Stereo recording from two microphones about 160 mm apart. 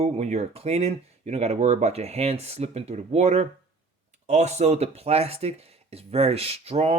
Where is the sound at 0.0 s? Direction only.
45° right (ahead or behind).